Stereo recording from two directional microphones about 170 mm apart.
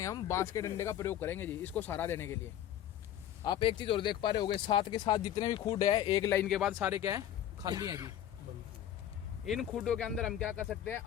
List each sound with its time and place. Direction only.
0.0 s speech: 20° left (ahead or behind)
3.4 s speech: 30° left (ahead or behind)
6.5 s speech: 5° right (ahead or behind); by 8.1 s 20° right (ahead or behind)
9.5 s speech: centre (ahead or behind)